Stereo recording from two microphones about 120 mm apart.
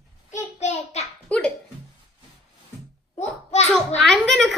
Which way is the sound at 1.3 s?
10° left (ahead or behind).